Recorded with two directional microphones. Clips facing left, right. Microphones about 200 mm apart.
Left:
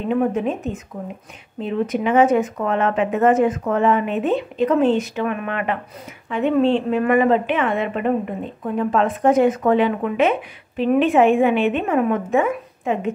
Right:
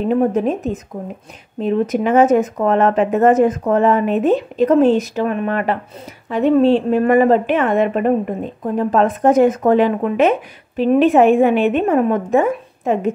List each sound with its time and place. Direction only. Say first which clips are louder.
0.1 s a woman's voice: right 2 dB; 40° right (ahead or behind)